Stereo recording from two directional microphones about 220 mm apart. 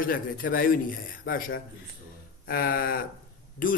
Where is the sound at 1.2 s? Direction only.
40° left (ahead or behind).